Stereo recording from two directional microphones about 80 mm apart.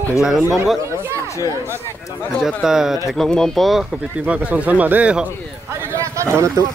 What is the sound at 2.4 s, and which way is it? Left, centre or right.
Speech, centre.